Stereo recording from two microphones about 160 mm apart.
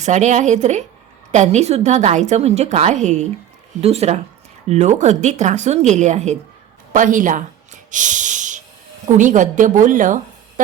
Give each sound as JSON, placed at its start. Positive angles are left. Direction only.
{"t": 0.0, "sound": "a woman's voice", "side_deg": -50}